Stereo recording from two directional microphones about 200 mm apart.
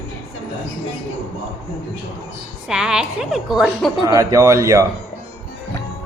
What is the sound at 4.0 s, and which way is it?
Speech, 15° right (ahead or behind).